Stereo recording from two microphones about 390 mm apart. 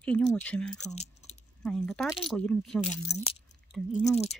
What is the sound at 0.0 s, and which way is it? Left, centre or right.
Speech, centre.